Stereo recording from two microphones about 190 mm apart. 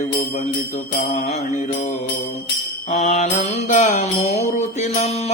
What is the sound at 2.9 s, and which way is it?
Mantra, 40° left (ahead or behind).